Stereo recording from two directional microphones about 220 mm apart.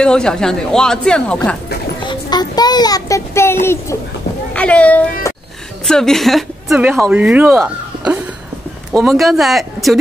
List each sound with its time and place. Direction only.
0.0 s speech: 5° left (ahead or behind)
2.0 s a child's voice: 20° left (ahead or behind); by 9.9 s centre (ahead or behind)